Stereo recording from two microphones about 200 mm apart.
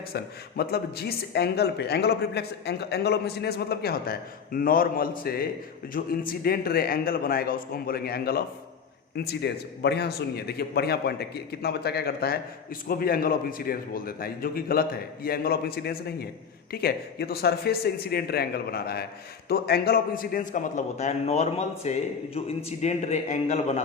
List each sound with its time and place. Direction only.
0.1 s a man's voice: 50° left (ahead or behind); by 23.8 s 35° left (ahead or behind)